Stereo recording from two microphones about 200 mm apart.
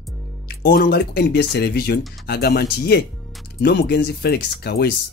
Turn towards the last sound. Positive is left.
turn(degrees=55)  # may be behind; listen again after turning